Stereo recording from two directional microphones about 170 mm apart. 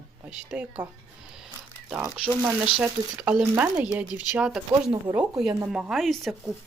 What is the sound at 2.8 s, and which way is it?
Speech, 5° right (ahead or behind).